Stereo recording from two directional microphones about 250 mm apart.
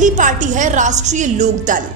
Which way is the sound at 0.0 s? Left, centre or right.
Right.